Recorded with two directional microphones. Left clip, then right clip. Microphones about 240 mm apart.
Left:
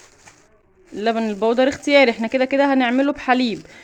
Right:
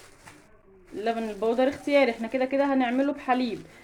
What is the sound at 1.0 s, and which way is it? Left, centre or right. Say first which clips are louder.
Speech: left 8 dB; left.